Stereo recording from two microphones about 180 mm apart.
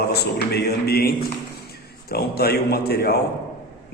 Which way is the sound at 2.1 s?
60° left (ahead or behind).